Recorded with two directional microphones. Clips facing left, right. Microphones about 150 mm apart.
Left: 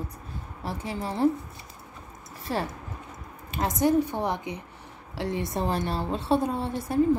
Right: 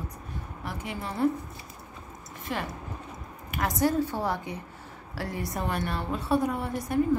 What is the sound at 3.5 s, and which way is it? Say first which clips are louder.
A woman's voice: left 3 dB; 20° left (ahead or behind).